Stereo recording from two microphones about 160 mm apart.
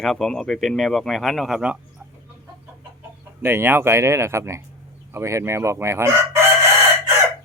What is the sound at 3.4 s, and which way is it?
Chicken, 15° right (ahead or behind).